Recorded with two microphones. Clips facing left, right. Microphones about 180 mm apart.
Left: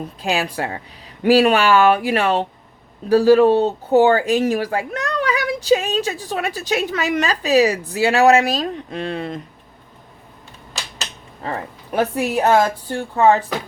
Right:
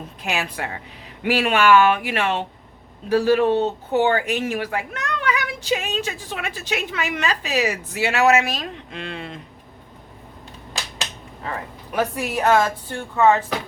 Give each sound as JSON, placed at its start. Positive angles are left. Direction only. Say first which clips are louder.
{"t": 0.2, "sound": "speech", "louder": "left 5 dB", "side_deg": 30}
{"t": 11.4, "sound": "speech", "louder": "left 4 dB", "side_deg": 35}